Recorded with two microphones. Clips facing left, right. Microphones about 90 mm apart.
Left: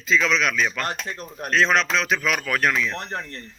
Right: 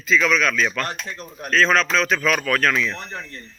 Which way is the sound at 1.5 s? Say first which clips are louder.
Right 2 dB; 20° left (ahead or behind).